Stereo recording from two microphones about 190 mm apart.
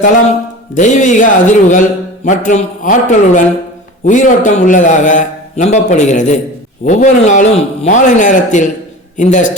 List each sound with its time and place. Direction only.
0.8 s a man's voice: 40° left (ahead or behind)